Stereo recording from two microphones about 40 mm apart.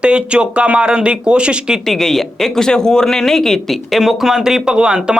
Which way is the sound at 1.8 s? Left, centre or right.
Centre.